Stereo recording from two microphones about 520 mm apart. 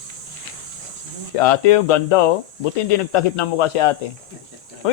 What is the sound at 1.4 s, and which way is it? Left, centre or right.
Speech, left.